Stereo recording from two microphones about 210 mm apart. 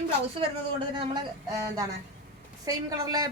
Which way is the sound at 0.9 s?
25° right (ahead or behind).